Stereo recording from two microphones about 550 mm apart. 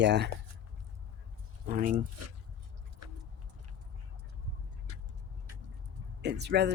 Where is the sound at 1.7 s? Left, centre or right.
Centre.